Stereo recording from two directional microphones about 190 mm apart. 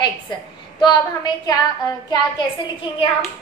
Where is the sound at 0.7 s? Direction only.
20° left (ahead or behind).